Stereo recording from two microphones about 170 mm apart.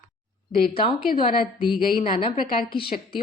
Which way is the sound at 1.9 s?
30° left (ahead or behind).